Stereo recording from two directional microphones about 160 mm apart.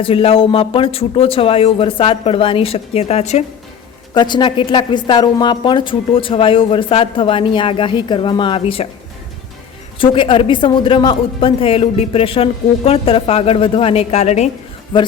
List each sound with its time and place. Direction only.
0.0 s a woman's voice: 35° left (ahead or behind)
4.1 s a woman's voice: 30° left (ahead or behind)
10.0 s a woman's voice: 35° left (ahead or behind)